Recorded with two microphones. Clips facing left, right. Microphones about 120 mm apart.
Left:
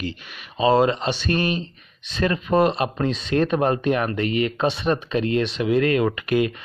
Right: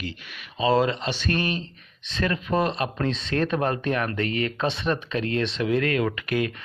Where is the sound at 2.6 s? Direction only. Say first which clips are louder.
Left 4 dB; 15° left (ahead or behind).